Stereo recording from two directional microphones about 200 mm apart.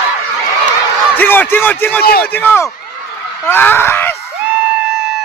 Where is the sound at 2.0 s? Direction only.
50° left (ahead or behind).